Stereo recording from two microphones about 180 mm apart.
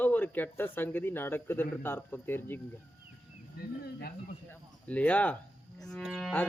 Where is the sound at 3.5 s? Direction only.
55° left (ahead or behind).